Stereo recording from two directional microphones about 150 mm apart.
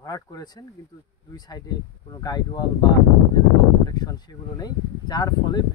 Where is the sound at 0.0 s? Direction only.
25° left (ahead or behind).